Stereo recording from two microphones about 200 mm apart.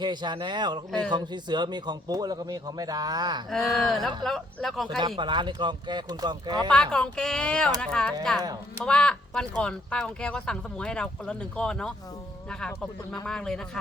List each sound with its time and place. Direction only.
0.0 s speech: 20° right (ahead or behind)
3.8 s speech: centre (ahead or behind)
4.9 s speech: 25° right (ahead or behind)
6.7 s speech: 5° left (ahead or behind)